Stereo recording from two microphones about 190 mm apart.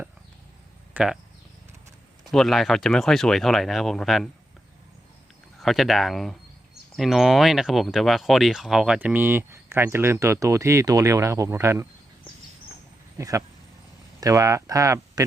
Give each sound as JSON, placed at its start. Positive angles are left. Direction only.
{"t": 0.9, "sound": "speech", "side_deg": -5}
{"t": 2.3, "sound": "speech", "side_deg": 0}
{"t": 5.5, "sound": "speech", "side_deg": 0}
{"t": 13.1, "sound": "speech", "side_deg": -15}